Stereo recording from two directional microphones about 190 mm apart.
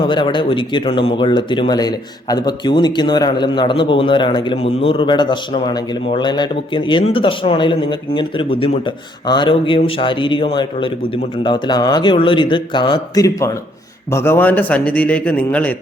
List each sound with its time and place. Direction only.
0.1 s a man's voice: 25° left (ahead or behind); by 15.7 s 10° left (ahead or behind)